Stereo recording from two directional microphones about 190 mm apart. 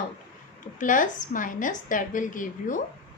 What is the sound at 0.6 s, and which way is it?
A woman's voice, 45° left (ahead or behind).